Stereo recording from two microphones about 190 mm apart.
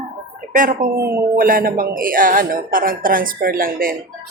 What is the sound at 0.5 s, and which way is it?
Speech, 45° right (ahead or behind).